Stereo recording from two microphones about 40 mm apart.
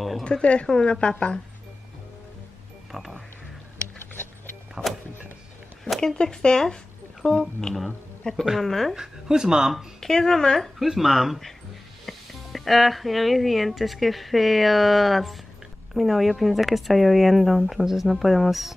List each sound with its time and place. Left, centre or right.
0.2 s speech: left
0.7 s speech: centre
2.9 s speech: centre
4.8 s a sound: right
5.9 s a woman's voice: centre
8.9 s speech: centre
9.9 s speech: centre
10.8 s speech: centre